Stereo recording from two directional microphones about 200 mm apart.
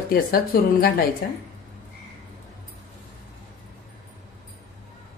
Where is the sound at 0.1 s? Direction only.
45° left (ahead or behind).